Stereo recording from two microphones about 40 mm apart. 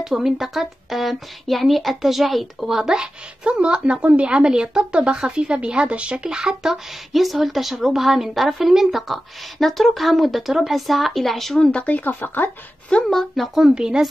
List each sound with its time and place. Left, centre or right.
0.0 s speech: centre
3.4 s a woman's voice: right
4.3 s speech: right
6.2 s speech: centre
7.1 s speech: centre
11.8 s speech: left
12.9 s speech: left
13.4 s a woman's voice: centre
13.7 s speech: centre